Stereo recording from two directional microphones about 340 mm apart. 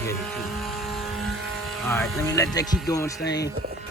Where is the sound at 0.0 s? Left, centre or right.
Centre.